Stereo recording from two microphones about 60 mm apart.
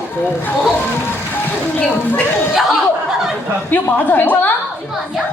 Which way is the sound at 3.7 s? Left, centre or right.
Left.